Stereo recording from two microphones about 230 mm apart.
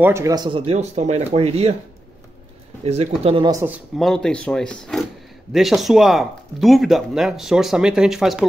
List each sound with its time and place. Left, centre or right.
0.0 s speech: centre
2.8 s speech: right; by 8.5 s centre